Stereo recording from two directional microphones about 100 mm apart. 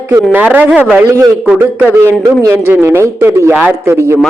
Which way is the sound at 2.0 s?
25° right (ahead or behind).